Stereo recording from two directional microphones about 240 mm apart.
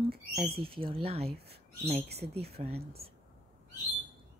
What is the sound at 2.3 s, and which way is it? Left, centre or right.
Speech, right.